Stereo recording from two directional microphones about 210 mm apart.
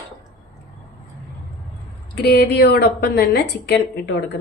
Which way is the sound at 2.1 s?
50° left (ahead or behind).